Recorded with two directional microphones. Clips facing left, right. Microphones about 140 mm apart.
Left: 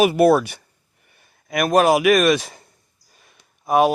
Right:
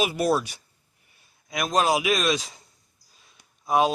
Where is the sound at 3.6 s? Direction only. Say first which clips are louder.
Left 5 dB; 60° left (ahead or behind).